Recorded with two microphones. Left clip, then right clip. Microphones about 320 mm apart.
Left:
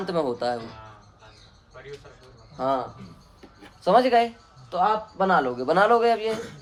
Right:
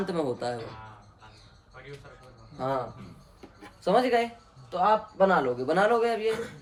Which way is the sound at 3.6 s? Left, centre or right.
Centre.